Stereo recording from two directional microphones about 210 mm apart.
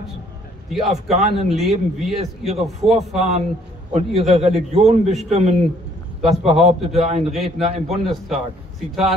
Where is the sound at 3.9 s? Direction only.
30° right (ahead or behind).